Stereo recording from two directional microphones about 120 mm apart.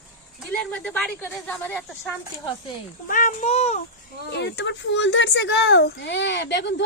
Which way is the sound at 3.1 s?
90° left.